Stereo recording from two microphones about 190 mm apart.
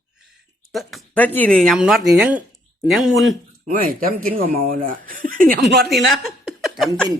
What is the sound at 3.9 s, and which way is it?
Speech, 45° right (ahead or behind).